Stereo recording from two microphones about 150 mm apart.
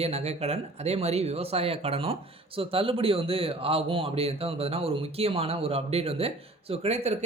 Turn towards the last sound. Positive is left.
turn(degrees=-45)  # may be behind; listen again after turning